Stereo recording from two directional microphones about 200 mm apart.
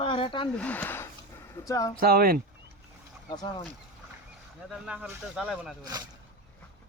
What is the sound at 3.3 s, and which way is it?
Speech, 20° left (ahead or behind).